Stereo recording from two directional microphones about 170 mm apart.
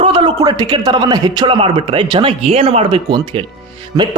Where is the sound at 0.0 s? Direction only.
30° right (ahead or behind).